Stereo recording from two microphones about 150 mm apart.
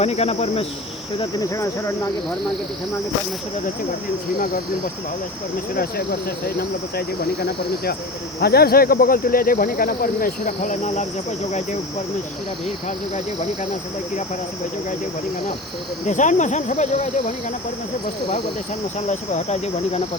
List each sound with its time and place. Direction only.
0.0 s speech: 45° left (ahead or behind)
1.4 s speech: 20° left (ahead or behind)
5.7 s speech: 90° left; by 11.8 s 50° left (ahead or behind)
13.1 s speech: 50° left (ahead or behind)
16.0 s speech: 55° left (ahead or behind)
18.9 s speech: 50° left (ahead or behind)